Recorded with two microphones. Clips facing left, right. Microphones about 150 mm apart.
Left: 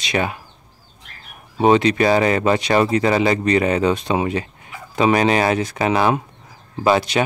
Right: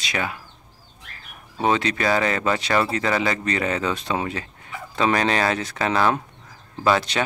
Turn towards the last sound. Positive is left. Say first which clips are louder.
# left 4 dB
turn(degrees=15)  # may be behind; listen again after turning